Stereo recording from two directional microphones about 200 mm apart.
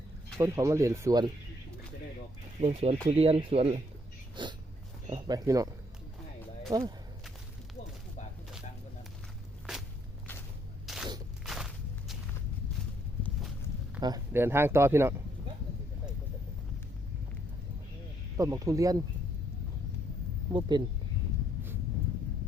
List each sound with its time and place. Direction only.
0.3 s speech: 15° right (ahead or behind)
2.6 s speech: 35° right (ahead or behind); by 5.6 s 15° right (ahead or behind)
6.7 s speech: 20° right (ahead or behind)
9.7 s walk: centre (ahead or behind)
10.8 s a sound: centre (ahead or behind)
11.4 s walk: centre (ahead or behind)
14.0 s speech: 15° right (ahead or behind)
18.3 s speech: 15° right (ahead or behind)
20.5 s speech: 20° right (ahead or behind)